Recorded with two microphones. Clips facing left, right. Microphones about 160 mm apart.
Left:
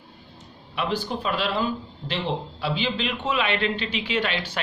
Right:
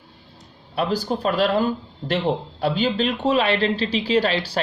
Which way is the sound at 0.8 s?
40° right (ahead or behind).